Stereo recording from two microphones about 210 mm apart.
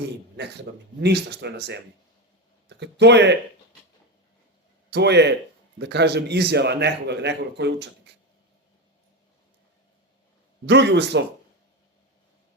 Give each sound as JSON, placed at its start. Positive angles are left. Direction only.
{"t": 1.0, "sound": "a man's voice", "side_deg": -55}
{"t": 4.9, "sound": "a man's voice", "side_deg": -55}
{"t": 10.7, "sound": "speech", "side_deg": -55}